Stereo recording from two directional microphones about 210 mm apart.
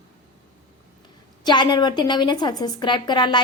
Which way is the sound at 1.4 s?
20° left (ahead or behind).